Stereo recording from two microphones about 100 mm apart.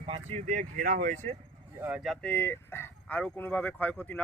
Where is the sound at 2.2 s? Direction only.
20° left (ahead or behind).